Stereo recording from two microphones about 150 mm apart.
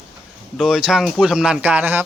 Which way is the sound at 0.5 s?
5° right (ahead or behind).